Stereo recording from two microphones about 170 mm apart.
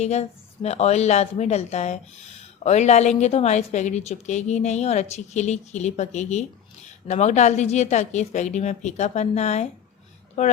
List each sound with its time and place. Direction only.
0.0 s a woman's voice: 40° left (ahead or behind)